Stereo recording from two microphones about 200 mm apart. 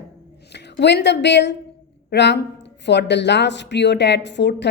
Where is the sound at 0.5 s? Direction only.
60° left (ahead or behind).